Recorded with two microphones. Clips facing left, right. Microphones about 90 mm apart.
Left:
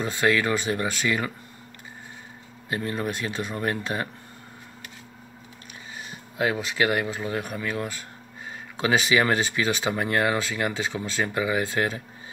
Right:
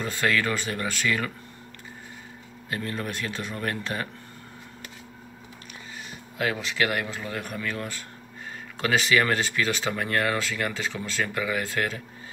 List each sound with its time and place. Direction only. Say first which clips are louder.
0.0 s speech: left 3 dB; 15° left (ahead or behind)
2.7 s speech: left 3 dB; 15° left (ahead or behind)
6.3 s speech: left 2 dB; 20° left (ahead or behind)